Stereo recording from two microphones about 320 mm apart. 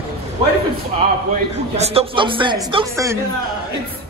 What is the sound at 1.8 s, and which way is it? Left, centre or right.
Speech, centre.